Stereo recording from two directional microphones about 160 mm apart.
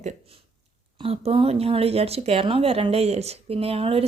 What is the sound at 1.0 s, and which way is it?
Speech, 35° right (ahead or behind).